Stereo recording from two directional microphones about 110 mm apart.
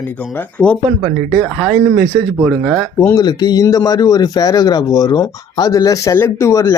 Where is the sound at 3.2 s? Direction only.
40° left (ahead or behind).